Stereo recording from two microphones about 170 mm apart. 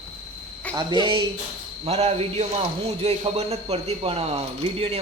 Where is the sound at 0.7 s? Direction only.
25° right (ahead or behind).